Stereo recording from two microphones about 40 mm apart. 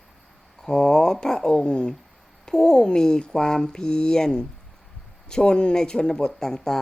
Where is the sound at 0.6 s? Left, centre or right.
Centre.